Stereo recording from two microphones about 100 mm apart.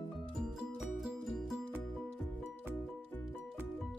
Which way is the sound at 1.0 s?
Centre (ahead or behind).